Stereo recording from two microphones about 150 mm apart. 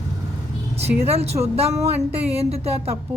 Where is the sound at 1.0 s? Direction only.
45° right (ahead or behind).